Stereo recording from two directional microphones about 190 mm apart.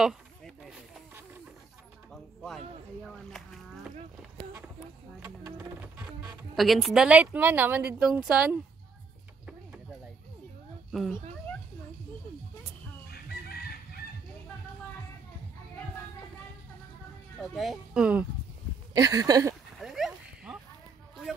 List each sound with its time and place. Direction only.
0.0 s a sound: centre (ahead or behind)
3.9 s a sound: centre (ahead or behind)
5.2 s music: 15° right (ahead or behind)
6.5 s a woman's voice: centre (ahead or behind)
10.9 s speech: centre (ahead or behind)
13.1 s chicken: 55° left (ahead or behind)
17.4 s speech: centre (ahead or behind)
18.9 s speech: 20° right (ahead or behind)
19.8 s a sound: centre (ahead or behind)